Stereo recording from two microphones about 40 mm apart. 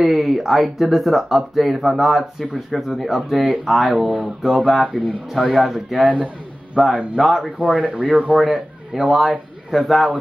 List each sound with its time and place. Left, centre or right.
0.0 s speech: centre
6.8 s speech: centre
7.2 s speech: centre
7.7 s speech: right
8.4 s a man's voice: centre